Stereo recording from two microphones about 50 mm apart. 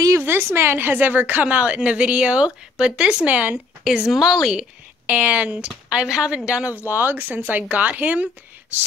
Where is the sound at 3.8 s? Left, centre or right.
Centre.